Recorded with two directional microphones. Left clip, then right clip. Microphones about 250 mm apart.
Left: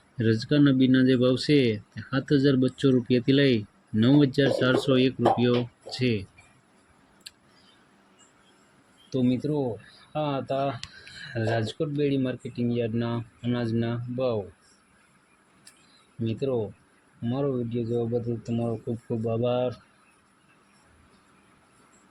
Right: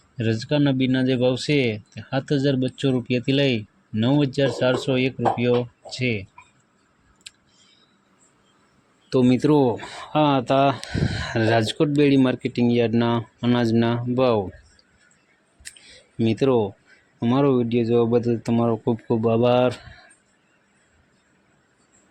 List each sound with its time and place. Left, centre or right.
0.2 s speech: centre
9.0 s speech: right
16.2 s speech: right